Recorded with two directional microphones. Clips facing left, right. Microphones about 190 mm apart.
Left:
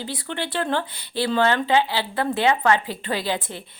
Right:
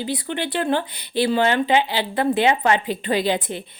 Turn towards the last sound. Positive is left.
turn(degrees=-20)  # may be behind; listen again after turning